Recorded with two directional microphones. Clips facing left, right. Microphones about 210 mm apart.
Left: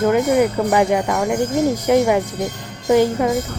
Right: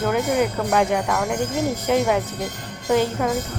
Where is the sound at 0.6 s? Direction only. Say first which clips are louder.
Left 4 dB; 10° left (ahead or behind).